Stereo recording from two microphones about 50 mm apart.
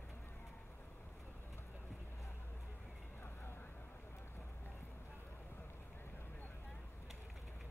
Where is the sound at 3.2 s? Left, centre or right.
Left.